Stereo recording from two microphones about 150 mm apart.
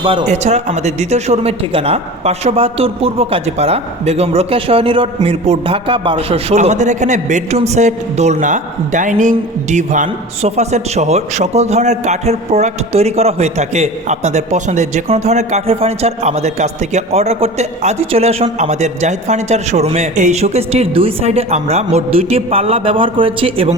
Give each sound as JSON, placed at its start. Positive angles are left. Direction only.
{"t": 0.0, "sound": "a man's voice", "side_deg": -35}
{"t": 0.3, "sound": "a man's voice", "side_deg": -50}